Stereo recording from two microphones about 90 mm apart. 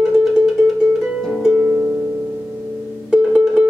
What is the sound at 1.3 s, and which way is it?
Harp, 5° right (ahead or behind).